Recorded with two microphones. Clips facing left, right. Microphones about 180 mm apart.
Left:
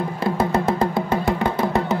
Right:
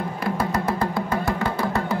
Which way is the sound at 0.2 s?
25° left (ahead or behind).